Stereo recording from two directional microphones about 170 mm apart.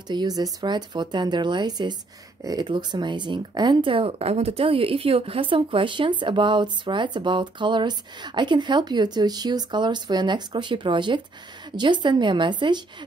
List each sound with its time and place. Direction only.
0.1 s speech: 25° right (ahead or behind)